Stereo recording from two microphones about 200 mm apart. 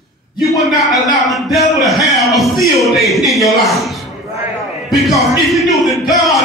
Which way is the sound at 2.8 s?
Centre (ahead or behind).